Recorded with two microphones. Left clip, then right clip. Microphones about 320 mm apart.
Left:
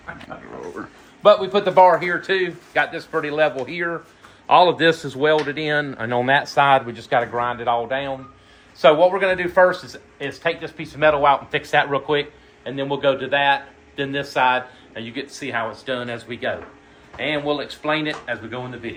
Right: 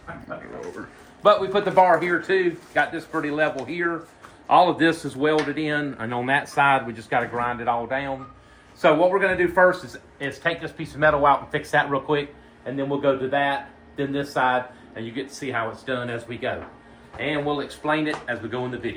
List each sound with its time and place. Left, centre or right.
1.2 s speech: left